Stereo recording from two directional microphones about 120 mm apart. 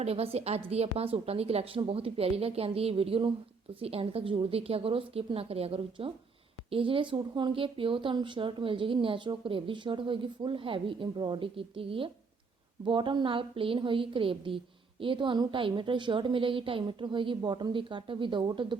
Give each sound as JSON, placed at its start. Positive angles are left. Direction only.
{"t": 0.0, "sound": "a woman's voice", "side_deg": -55}